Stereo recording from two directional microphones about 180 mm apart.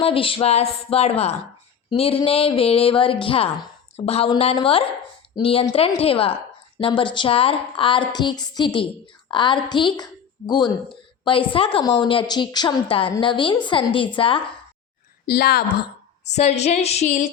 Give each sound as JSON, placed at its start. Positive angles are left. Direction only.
{"t": 0.0, "sound": "a woman's voice", "side_deg": 30}
{"t": 15.3, "sound": "a woman's voice", "side_deg": 60}
{"t": 16.2, "sound": "a woman's voice", "side_deg": 40}